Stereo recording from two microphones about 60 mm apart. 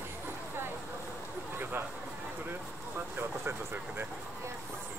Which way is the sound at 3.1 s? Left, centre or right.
Right.